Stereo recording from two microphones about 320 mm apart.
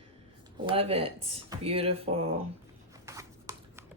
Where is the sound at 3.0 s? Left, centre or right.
Centre.